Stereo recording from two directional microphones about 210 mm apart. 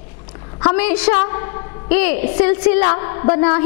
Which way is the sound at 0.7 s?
10° left (ahead or behind).